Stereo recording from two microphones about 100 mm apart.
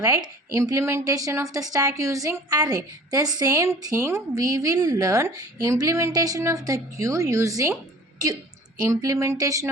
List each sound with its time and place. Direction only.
0.5 s speech: 30° right (ahead or behind)
8.9 s speech: 30° right (ahead or behind)